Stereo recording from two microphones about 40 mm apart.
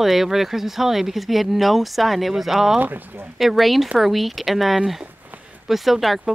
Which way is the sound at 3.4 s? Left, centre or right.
Centre.